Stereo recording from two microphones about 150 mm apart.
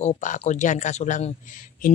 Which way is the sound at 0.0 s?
50° left (ahead or behind).